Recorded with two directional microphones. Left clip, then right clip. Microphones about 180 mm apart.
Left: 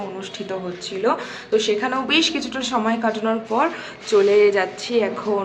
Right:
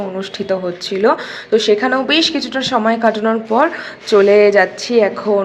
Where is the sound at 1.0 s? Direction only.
30° right (ahead or behind).